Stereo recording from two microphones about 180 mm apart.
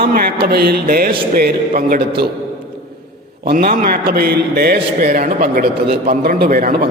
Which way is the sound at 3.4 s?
60° right (ahead or behind).